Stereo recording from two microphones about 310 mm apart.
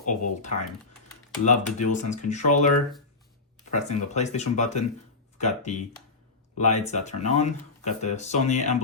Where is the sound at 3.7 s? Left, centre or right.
Left.